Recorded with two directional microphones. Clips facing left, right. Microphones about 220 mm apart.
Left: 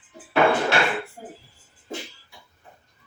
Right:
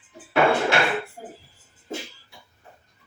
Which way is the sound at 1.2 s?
15° right (ahead or behind).